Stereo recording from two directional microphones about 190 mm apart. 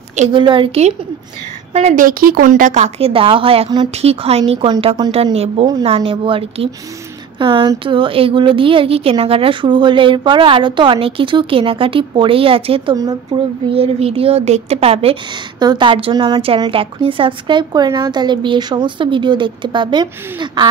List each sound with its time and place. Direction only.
0.3 s a woman's voice: 25° right (ahead or behind)